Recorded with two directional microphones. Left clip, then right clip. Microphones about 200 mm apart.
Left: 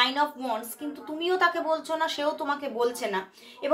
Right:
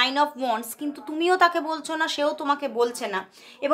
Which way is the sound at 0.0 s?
40° right (ahead or behind).